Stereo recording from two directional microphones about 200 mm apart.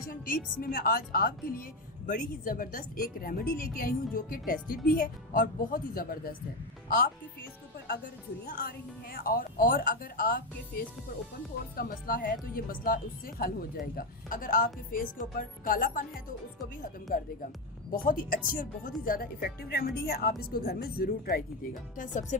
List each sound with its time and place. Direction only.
0.0 s a woman's voice: 45° left (ahead or behind)
8.4 s a woman's voice: 50° left (ahead or behind)
17.1 s a woman's voice: 45° left (ahead or behind)